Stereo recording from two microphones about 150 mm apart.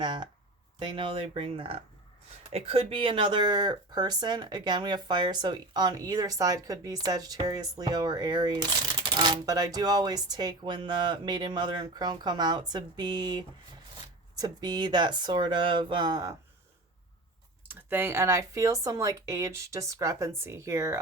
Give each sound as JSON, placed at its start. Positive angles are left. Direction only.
{"t": 0.0, "sound": "speech", "side_deg": -30}
{"t": 17.7, "sound": "speech", "side_deg": -15}